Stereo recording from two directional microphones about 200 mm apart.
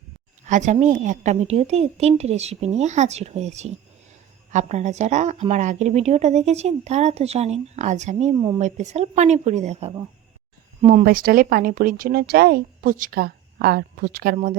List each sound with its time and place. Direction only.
0.4 s a woman's voice: 35° right (ahead or behind)